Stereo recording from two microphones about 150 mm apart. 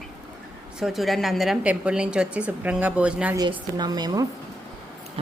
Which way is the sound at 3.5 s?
30° right (ahead or behind).